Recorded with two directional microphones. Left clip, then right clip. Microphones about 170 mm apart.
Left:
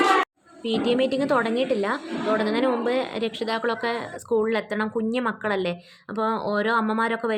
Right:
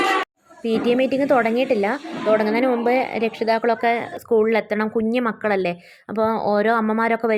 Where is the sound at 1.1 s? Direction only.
20° right (ahead or behind).